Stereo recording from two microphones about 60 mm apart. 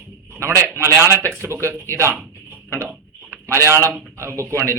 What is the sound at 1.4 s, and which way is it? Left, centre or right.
Speech, right.